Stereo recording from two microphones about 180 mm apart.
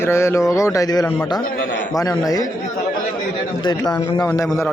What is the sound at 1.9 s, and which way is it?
Speech, 20° left (ahead or behind).